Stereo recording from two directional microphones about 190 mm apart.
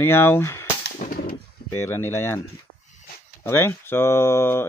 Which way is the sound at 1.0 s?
55° left (ahead or behind).